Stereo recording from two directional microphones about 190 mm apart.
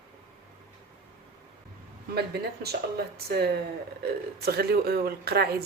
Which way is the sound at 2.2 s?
55° right (ahead or behind).